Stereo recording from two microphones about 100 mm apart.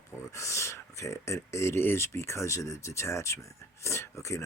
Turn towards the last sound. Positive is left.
turn(degrees=30)  # may be behind; listen again after turning